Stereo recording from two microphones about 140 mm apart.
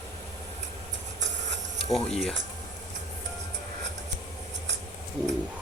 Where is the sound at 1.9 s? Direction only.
5° left (ahead or behind).